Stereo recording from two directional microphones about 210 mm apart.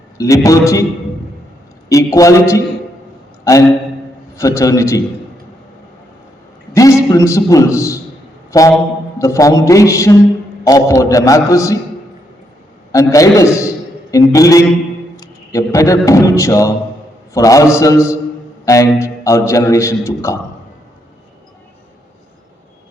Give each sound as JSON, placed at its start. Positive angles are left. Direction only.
{"t": 0.2, "sound": "a man's voice", "side_deg": 15}
{"t": 1.9, "sound": "a man's voice", "side_deg": 15}
{"t": 4.4, "sound": "a man's voice", "side_deg": 15}
{"t": 6.7, "sound": "a man's voice", "side_deg": 15}
{"t": 12.9, "sound": "a man's voice", "side_deg": 15}